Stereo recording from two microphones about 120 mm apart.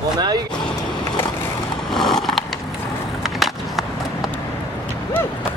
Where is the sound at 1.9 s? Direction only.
Centre (ahead or behind).